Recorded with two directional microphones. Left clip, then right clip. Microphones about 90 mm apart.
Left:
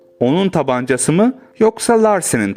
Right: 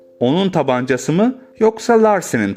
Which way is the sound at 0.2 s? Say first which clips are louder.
Left 1 dB; 20° left (ahead or behind).